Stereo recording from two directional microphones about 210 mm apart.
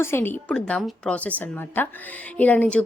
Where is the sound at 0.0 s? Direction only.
10° left (ahead or behind).